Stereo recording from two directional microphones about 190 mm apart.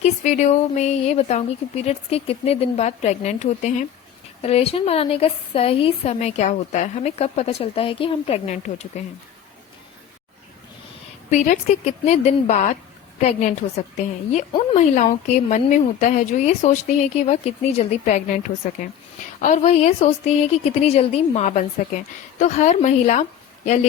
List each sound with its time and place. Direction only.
0.0 s speech: 40° left (ahead or behind)
11.3 s speech: 40° left (ahead or behind)